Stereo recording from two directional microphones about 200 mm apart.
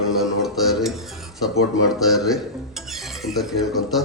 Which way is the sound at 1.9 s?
Centre (ahead or behind).